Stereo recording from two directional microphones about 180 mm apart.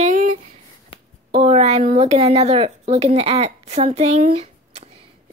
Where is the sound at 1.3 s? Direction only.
35° right (ahead or behind).